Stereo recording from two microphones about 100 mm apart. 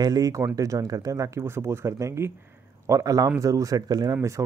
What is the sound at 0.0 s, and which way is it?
Speech, 40° right (ahead or behind).